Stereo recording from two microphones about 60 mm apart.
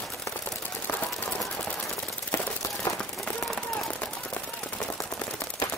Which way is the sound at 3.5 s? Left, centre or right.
Centre.